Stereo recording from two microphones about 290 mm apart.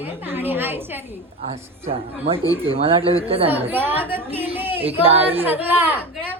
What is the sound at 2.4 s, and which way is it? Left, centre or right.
Speech, centre.